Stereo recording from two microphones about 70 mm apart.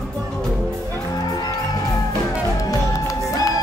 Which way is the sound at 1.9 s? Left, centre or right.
Left.